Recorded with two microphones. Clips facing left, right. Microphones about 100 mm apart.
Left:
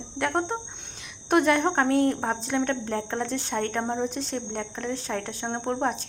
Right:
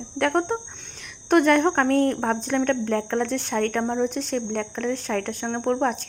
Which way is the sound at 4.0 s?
30° left (ahead or behind).